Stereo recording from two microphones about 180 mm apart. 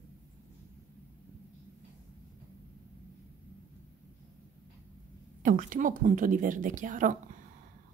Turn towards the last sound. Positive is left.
turn(degrees=-45)  # may be behind; listen again after turning